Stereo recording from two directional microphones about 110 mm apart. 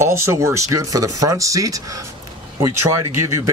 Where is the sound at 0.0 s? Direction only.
25° right (ahead or behind).